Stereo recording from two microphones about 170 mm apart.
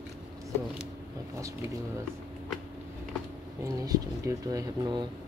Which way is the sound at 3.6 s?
20° right (ahead or behind).